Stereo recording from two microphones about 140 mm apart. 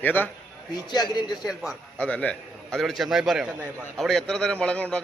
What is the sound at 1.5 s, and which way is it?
A man's voice, 5° left (ahead or behind).